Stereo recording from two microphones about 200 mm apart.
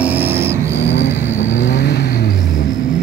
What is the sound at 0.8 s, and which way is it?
Vehicle, 60° left (ahead or behind).